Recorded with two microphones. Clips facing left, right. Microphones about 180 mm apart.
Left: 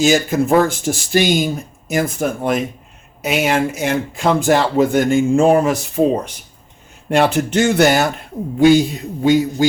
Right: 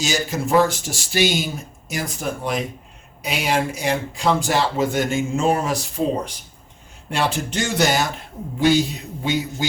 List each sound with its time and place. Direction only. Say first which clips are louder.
0.0 s speech: left 9 dB; 55° left (ahead or behind)
7.2 s speech: left 8 dB; 60° left (ahead or behind)
9.2 s speech: left 10 dB; 45° left (ahead or behind)